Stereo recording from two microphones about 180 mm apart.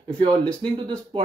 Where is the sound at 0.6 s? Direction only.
25° right (ahead or behind).